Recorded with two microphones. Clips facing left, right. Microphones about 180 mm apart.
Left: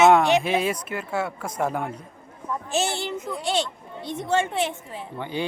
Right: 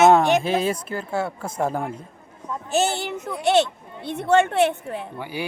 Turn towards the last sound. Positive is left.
turn(degrees=-10)  # may be behind; listen again after turning